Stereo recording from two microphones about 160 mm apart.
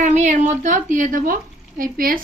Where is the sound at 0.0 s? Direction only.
50° right (ahead or behind).